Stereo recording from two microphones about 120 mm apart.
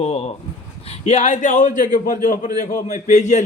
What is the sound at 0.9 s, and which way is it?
A man's voice, 70° left (ahead or behind).